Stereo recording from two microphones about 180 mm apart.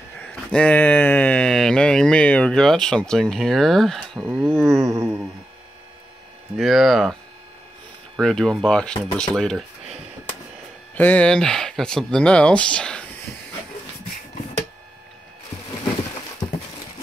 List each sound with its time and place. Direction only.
0.2 s speech: 5° left (ahead or behind)
4.3 s a sound: 10° right (ahead or behind)
6.5 s speech: centre (ahead or behind)
8.2 s speech: centre (ahead or behind)
11.0 s speech: 10° left (ahead or behind)
16.4 s a sound: 25° left (ahead or behind)